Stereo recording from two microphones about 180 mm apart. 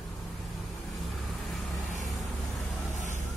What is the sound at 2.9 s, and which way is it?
Vehicle, 45° left (ahead or behind).